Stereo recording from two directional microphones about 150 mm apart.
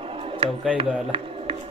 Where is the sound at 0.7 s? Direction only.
40° right (ahead or behind).